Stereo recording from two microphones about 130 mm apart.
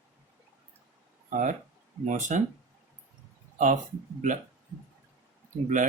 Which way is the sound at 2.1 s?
75° right (ahead or behind).